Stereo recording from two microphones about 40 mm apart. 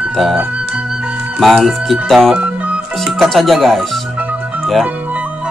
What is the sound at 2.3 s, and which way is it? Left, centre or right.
Music, right.